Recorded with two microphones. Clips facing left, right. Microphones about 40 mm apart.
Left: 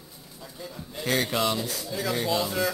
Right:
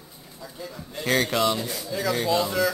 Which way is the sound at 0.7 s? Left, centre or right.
Centre.